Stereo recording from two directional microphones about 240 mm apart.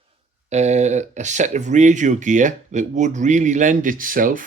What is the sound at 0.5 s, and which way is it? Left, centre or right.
Speech, right.